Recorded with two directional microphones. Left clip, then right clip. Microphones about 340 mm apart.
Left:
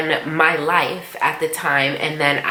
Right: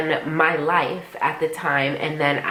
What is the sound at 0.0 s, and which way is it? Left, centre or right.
A woman's voice, centre.